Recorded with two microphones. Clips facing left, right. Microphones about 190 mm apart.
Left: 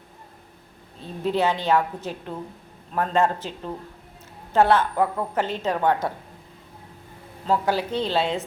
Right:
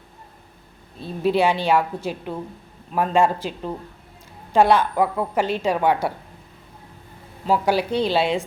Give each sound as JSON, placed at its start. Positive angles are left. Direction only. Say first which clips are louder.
{"t": 1.2, "sound": "a woman's voice", "louder": "right 4 dB", "side_deg": -10}
{"t": 7.4, "sound": "a woman's voice", "louder": "right 3 dB", "side_deg": -10}